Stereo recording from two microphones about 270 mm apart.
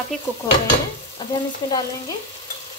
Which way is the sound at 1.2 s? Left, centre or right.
Centre.